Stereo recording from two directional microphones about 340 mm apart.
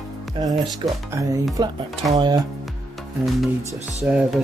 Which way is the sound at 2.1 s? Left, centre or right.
Centre.